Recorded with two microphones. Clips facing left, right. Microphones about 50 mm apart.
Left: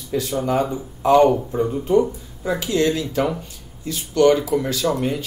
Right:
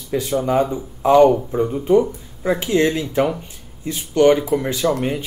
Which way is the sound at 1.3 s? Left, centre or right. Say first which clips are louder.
Right 2 dB; centre.